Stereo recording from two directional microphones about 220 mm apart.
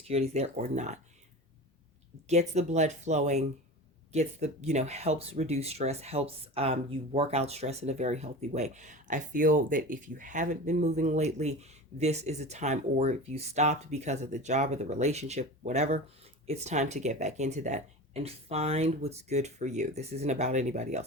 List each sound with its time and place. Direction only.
0.1 s speech: 30° right (ahead or behind)
2.2 s speech: 30° right (ahead or behind)